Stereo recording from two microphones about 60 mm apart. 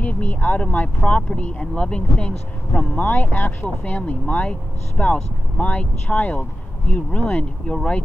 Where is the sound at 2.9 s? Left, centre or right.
Left.